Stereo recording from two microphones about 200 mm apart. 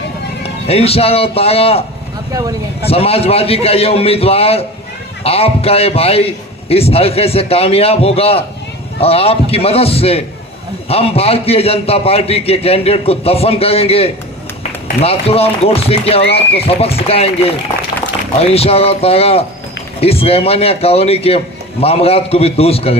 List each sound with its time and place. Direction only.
0.4 s a man's voice: 30° left (ahead or behind)
2.3 s speech: 20° right (ahead or behind)
2.8 s a man's voice: 30° left (ahead or behind)